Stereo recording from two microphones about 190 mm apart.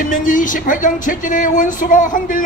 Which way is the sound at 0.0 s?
45° left (ahead or behind).